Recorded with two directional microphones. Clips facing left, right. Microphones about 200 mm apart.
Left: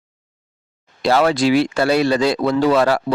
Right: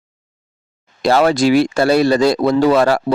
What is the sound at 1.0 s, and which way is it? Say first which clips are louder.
Speech: right 2 dB; 45° right (ahead or behind).